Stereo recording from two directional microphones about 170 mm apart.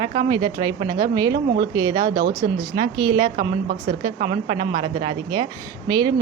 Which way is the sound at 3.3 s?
60° right (ahead or behind).